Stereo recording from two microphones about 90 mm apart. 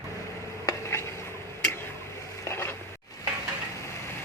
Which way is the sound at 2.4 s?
30° left (ahead or behind).